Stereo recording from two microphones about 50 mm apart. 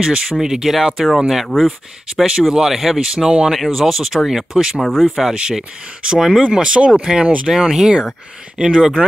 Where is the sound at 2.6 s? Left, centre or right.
Centre.